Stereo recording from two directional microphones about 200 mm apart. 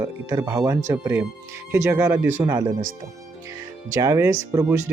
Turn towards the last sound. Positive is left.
turn(degrees=-15)  # may be behind; listen again after turning